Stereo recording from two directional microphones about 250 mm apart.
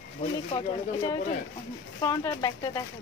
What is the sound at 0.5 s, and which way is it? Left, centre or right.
Speech, centre.